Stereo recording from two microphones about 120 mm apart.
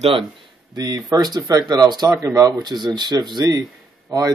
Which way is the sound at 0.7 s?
30° right (ahead or behind).